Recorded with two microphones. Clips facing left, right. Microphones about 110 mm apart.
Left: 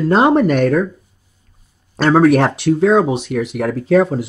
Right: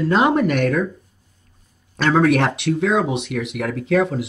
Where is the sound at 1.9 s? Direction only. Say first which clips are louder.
Left 5 dB; 30° left (ahead or behind).